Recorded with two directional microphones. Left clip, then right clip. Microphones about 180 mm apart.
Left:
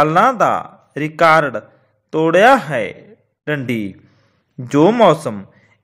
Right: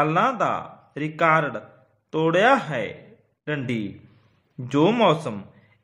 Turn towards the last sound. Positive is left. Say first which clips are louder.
# left 8 dB
turn(degrees=35)  # may be behind; listen again after turning